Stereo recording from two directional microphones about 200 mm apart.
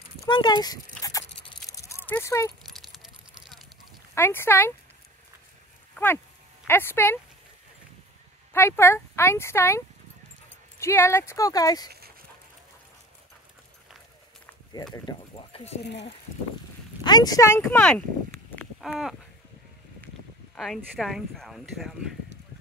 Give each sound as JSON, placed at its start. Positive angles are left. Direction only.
{"t": 0.2, "sound": "speech", "side_deg": 20}
{"t": 1.7, "sound": "a sound", "side_deg": 15}
{"t": 2.6, "sound": "keys jangling", "side_deg": 0}
{"t": 4.1, "sound": "speech", "side_deg": 10}
{"t": 5.9, "sound": "speech", "side_deg": 10}
{"t": 8.5, "sound": "speech", "side_deg": 10}
{"t": 15.0, "sound": "speech", "side_deg": 25}
{"t": 15.8, "sound": "speech", "side_deg": 60}
{"t": 17.0, "sound": "speech", "side_deg": 20}
{"t": 18.6, "sound": "a sound", "side_deg": 0}
{"t": 20.5, "sound": "speech", "side_deg": 0}